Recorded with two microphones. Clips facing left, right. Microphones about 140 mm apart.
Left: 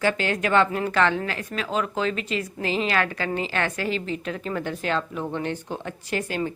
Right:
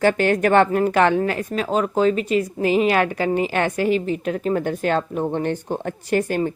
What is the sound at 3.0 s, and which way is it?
Speech, 20° right (ahead or behind).